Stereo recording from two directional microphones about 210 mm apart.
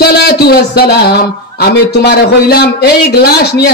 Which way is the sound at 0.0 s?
50° left (ahead or behind).